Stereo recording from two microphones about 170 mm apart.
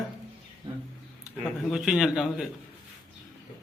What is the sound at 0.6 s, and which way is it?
Speech, 25° right (ahead or behind).